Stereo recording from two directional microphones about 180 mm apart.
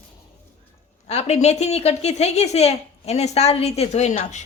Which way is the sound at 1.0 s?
35° left (ahead or behind).